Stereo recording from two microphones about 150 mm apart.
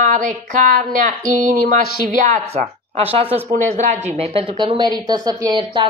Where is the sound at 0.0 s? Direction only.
60° right (ahead or behind).